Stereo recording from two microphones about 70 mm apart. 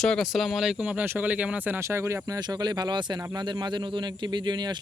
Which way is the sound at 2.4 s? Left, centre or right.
Right.